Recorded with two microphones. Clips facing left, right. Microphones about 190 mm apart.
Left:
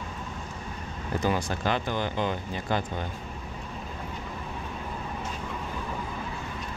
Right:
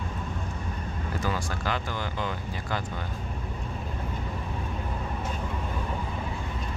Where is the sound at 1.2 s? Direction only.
20° left (ahead or behind).